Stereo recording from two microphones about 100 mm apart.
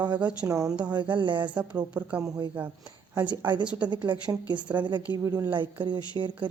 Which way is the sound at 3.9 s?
50° right (ahead or behind).